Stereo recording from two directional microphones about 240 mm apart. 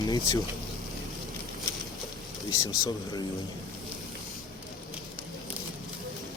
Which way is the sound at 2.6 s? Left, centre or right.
Centre.